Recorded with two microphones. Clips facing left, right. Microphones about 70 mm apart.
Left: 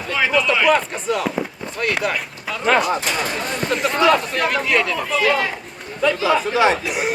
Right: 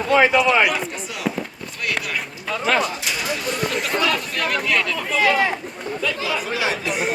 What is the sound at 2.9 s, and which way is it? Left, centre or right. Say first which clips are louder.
Speech: left 4 dB; left.